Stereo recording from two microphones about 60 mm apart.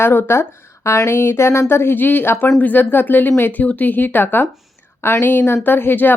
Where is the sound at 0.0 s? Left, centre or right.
Left.